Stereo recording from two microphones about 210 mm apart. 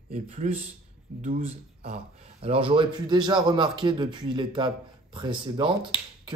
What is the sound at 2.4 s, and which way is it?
A man's voice, 25° right (ahead or behind).